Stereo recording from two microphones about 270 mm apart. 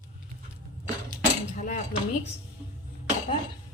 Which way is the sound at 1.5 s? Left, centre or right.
Left.